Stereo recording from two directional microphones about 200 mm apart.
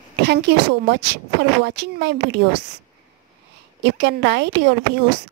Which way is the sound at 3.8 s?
55° right (ahead or behind).